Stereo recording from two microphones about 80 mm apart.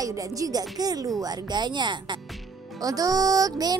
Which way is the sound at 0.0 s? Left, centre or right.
Right.